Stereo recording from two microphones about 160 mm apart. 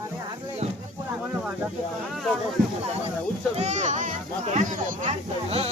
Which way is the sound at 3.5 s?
45° right (ahead or behind).